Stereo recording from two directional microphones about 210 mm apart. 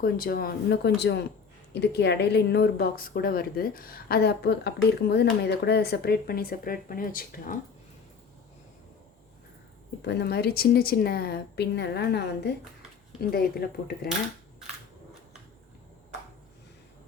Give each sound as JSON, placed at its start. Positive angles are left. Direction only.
{"t": 0.0, "sound": "speech", "side_deg": 45}
{"t": 10.0, "sound": "speech", "side_deg": 50}